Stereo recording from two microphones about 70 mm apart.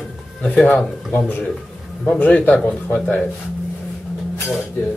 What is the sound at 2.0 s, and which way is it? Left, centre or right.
A man's voice, left.